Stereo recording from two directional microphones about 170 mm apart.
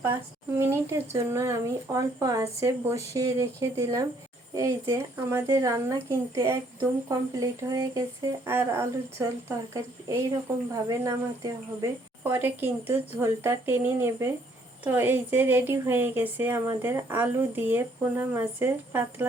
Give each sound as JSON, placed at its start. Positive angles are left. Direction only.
{"t": 0.6, "sound": "speech", "side_deg": -15}